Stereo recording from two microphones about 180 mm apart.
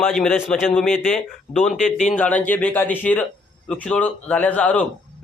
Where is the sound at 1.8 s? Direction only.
45° left (ahead or behind).